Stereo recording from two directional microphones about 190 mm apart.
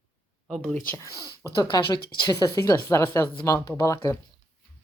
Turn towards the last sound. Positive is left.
turn(degrees=15)  # may be behind; listen again after turning